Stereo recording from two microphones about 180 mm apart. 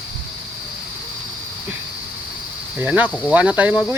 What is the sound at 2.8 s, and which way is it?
Speech, 10° right (ahead or behind).